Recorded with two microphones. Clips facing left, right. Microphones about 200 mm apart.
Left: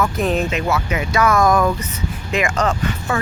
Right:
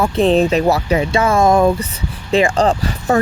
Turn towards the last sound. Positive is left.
turn(degrees=-35)  # may be behind; listen again after turning